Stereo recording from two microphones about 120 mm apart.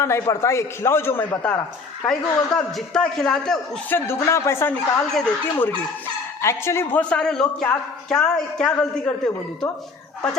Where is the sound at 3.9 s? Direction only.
20° left (ahead or behind).